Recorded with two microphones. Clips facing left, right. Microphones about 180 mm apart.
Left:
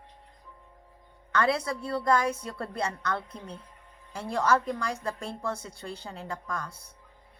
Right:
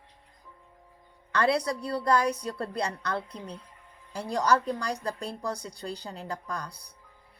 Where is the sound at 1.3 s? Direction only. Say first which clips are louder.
Right 1 dB; 35° right (ahead or behind).